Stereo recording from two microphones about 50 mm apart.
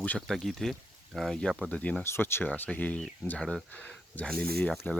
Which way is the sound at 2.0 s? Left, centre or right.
Left.